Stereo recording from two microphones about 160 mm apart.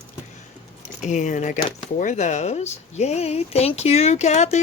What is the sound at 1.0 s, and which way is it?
Speech, 50° left (ahead or behind).